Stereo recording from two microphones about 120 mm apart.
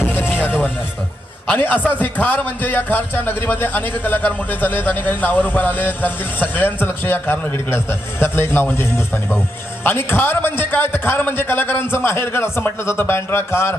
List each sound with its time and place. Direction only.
0.1 s music: 15° left (ahead or behind)
1.5 s a man's voice: 15° left (ahead or behind)
9.8 s a man's voice: 20° left (ahead or behind)